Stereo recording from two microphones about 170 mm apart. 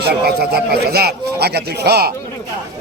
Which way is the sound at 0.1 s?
70° right (ahead or behind).